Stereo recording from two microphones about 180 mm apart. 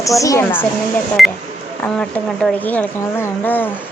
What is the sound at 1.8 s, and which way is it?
Speech, 5° left (ahead or behind).